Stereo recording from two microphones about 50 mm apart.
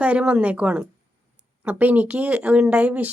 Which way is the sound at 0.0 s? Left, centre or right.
Right.